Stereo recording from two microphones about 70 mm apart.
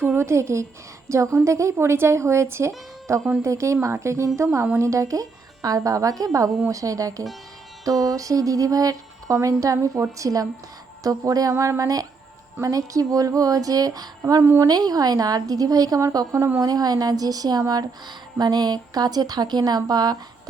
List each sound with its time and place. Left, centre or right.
0.2 s speech: right
14.4 s a woman's voice: right
14.7 s speech: right
16.1 s speech: right
16.6 s speech: right
18.3 s a woman's voice: right